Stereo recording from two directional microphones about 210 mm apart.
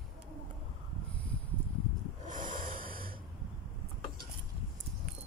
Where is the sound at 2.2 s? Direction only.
40° right (ahead or behind).